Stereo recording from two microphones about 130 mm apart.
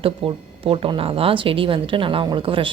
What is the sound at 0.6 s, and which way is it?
A woman's voice, 45° right (ahead or behind).